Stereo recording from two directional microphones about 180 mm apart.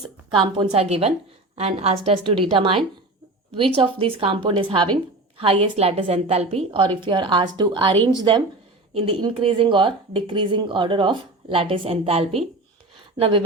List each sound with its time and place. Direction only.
0.5 s a woman's voice: 30° right (ahead or behind)